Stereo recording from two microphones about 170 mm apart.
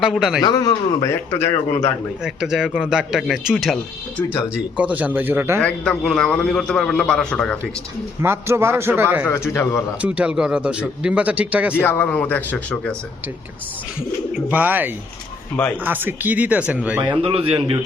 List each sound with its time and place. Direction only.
0.0 s a man's voice: centre (ahead or behind)
0.4 s a man's voice: 20° left (ahead or behind)
2.2 s a man's voice: 5° right (ahead or behind)
5.5 s a man's voice: 5° left (ahead or behind)
8.2 s speech: 15° right (ahead or behind)
9.2 s a man's voice: 15° left (ahead or behind)
10.0 s speech: 5° right (ahead or behind)
11.8 s a man's voice: 10° left (ahead or behind)
14.3 s speech: 10° right (ahead or behind)
17.0 s a man's voice: 30° right (ahead or behind)